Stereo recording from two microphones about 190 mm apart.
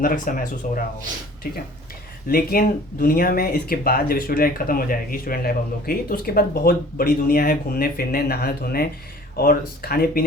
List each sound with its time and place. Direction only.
0.0 s speech: 45° left (ahead or behind)
2.2 s speech: 50° left (ahead or behind)